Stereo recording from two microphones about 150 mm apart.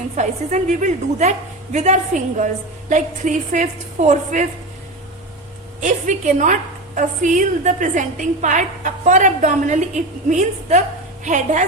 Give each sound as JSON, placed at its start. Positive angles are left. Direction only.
{"t": 0.2, "sound": "a woman's voice", "side_deg": -55}
{"t": 5.8, "sound": "a woman's voice", "side_deg": -55}